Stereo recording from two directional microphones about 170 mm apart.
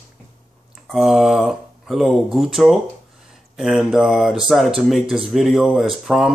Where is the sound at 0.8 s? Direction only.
Centre (ahead or behind).